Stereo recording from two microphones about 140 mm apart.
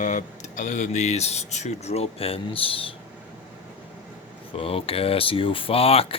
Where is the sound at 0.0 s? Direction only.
60° left (ahead or behind); by 2.9 s 40° left (ahead or behind).